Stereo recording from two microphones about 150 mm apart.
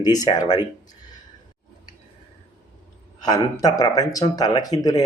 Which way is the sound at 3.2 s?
25° left (ahead or behind).